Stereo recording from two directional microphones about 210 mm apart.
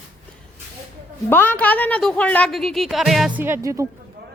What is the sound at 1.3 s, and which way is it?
Speech, 10° left (ahead or behind).